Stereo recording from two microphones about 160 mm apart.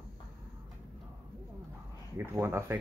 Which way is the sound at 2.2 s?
15° right (ahead or behind).